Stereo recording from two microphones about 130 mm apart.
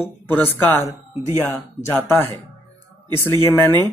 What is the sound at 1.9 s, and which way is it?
Speech, 15° left (ahead or behind).